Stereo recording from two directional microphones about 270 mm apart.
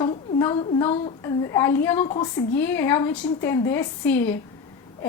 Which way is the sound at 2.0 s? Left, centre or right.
Centre.